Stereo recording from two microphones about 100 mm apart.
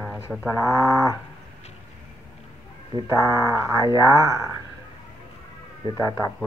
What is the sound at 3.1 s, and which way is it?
Speech, 30° right (ahead or behind).